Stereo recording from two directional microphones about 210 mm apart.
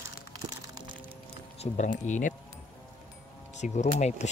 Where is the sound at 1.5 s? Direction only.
35° left (ahead or behind).